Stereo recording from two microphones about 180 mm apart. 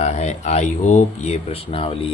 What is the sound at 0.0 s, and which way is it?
Speech, 40° left (ahead or behind).